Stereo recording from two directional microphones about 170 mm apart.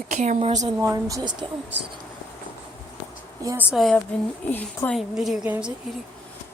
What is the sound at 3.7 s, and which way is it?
Speech, centre (ahead or behind).